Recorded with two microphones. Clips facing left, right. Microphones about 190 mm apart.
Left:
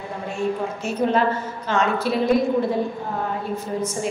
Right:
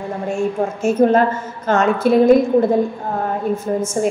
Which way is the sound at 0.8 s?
50° right (ahead or behind).